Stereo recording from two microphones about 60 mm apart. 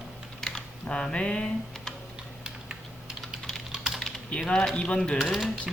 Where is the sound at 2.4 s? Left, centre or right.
Centre.